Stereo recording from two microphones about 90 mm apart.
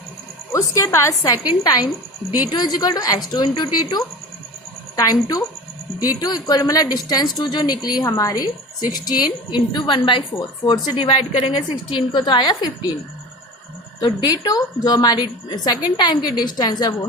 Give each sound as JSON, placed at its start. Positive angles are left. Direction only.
{"t": 0.5, "sound": "a woman's voice", "side_deg": 35}
{"t": 10.9, "sound": "a woman's voice", "side_deg": 85}
{"t": 14.0, "sound": "a woman's voice", "side_deg": 45}